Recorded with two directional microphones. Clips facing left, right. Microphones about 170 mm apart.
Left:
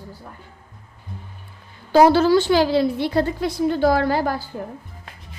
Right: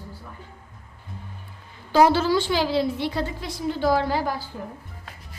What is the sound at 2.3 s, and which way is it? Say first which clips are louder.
A woman's voice: left 6 dB; 55° left (ahead or behind).